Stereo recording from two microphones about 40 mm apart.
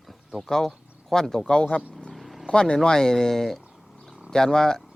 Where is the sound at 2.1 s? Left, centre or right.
Centre.